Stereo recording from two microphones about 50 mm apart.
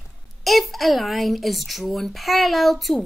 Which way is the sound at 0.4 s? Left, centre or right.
Centre.